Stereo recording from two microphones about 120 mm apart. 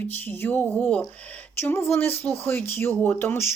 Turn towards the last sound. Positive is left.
turn(degrees=20)  # may be behind; listen again after turning